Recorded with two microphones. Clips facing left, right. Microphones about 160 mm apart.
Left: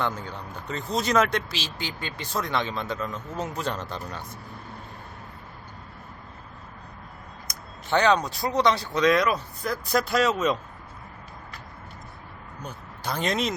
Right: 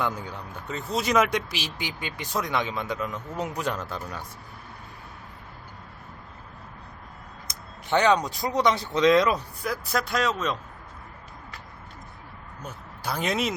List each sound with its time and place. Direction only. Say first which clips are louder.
0.0 s speech: even; 10° right (ahead or behind)
7.4 s speech: even; 15° right (ahead or behind)
9.6 s speech: left 3 dB; centre (ahead or behind)
12.5 s speech: left 1 dB; 5° right (ahead or behind)